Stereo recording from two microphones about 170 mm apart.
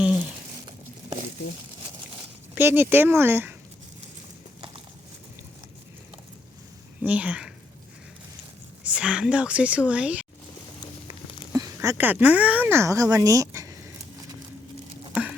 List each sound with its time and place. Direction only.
2.6 s speech: 15° right (ahead or behind)
7.0 s speech: 10° right (ahead or behind)
8.8 s speech: 5° right (ahead or behind)
11.5 s speech: 20° right (ahead or behind)
15.1 s a sound: 10° right (ahead or behind)